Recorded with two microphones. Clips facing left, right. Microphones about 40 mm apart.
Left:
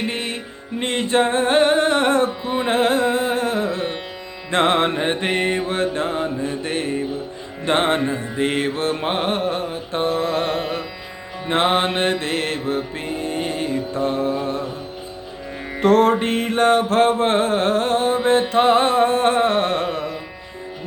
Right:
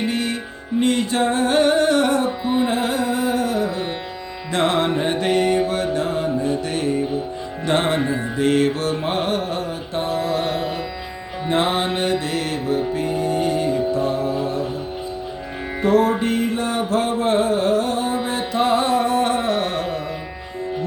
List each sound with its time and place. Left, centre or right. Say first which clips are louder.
0.1 s music: right 3 dB; left
2.4 s music: right 3 dB; centre
2.6 s carnatic music: left 3 dB; left
4.5 s music: left 1 dB; left
15.8 s music: left 2 dB; left